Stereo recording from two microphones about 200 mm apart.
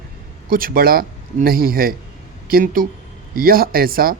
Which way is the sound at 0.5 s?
45° right (ahead or behind).